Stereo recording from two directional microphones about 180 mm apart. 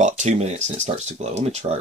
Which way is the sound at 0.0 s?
40° right (ahead or behind).